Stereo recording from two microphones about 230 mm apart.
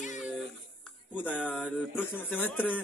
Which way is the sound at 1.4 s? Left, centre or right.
Centre.